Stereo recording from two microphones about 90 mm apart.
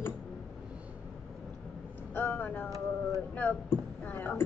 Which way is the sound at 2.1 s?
20° left (ahead or behind).